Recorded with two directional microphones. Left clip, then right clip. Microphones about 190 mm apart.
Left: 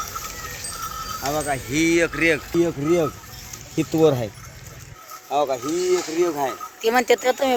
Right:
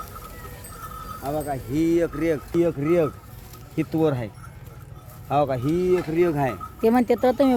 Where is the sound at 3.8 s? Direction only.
40° left (ahead or behind).